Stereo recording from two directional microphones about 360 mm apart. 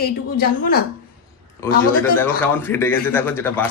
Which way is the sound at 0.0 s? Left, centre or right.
Left.